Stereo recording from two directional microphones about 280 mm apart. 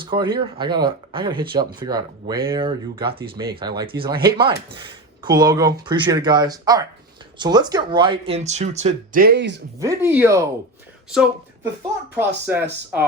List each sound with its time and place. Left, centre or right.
0.0 s speech: centre; by 9.6 s right
9.7 s speech: centre